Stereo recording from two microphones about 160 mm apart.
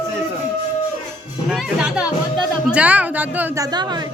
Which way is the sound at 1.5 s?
5° right (ahead or behind).